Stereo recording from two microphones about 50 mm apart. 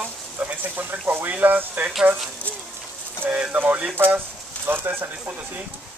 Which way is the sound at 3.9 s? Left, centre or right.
Right.